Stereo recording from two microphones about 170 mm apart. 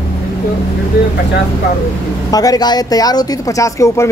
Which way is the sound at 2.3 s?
20° left (ahead or behind).